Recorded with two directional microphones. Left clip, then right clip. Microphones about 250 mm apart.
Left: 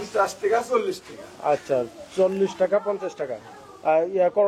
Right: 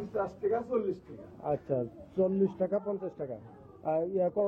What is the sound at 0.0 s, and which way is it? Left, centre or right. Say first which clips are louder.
Speech: left 10 dB; centre.